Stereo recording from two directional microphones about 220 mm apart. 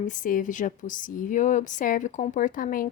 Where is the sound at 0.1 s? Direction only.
35° left (ahead or behind).